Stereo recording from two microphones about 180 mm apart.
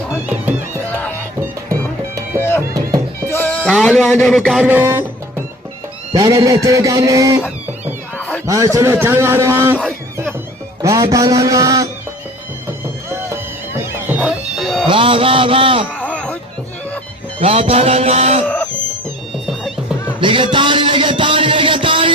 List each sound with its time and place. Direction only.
0.9 s music: 10° left (ahead or behind)
2.4 s music: 15° left (ahead or behind)
2.6 s music: 20° right (ahead or behind)
3.2 s a man's voice: 10° left (ahead or behind); by 5.0 s 15° right (ahead or behind)
6.1 s music: 20° right (ahead or behind)
8.4 s a man's voice: 20° right (ahead or behind)
11.1 s music: 20° right (ahead or behind)
14.1 s music: 5° right (ahead or behind)
14.8 s a man's voice: 30° right (ahead or behind)
16.0 s a sound: 5° left (ahead or behind)
17.4 s a sound: 35° right (ahead or behind)
18.4 s a sound: 5° left (ahead or behind)
19.5 s music: centre (ahead or behind)
20.1 s music: 30° right (ahead or behind)